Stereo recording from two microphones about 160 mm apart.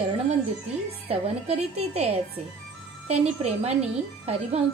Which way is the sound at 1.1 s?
40° right (ahead or behind).